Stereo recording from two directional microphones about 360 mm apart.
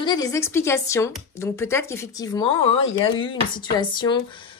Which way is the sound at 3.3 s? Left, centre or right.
Centre.